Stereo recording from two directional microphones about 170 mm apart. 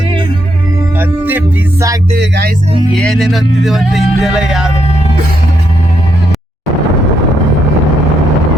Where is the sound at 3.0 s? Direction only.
Centre (ahead or behind).